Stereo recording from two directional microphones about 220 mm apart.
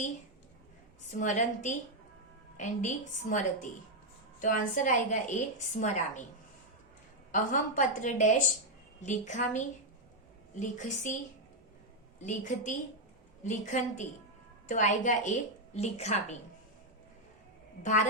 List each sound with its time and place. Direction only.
1.2 s a woman's voice: 35° left (ahead or behind)
7.3 s a woman's voice: 35° left (ahead or behind)
12.2 s a woman's voice: 35° left (ahead or behind)